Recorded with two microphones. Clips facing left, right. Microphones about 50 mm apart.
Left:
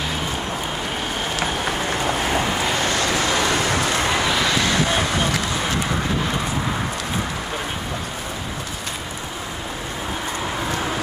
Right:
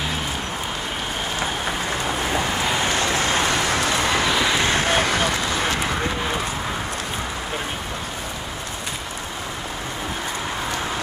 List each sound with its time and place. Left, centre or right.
2.2 s vehicle: centre
2.7 s vehicle: centre
3.0 s vehicle: right
3.8 s vehicle: centre
4.6 s vehicle: right
5.8 s a sound: centre